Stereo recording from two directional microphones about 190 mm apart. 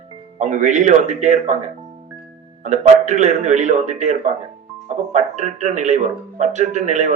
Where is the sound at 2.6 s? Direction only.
40° right (ahead or behind).